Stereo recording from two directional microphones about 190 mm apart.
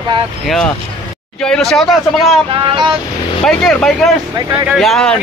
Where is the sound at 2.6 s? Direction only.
25° right (ahead or behind).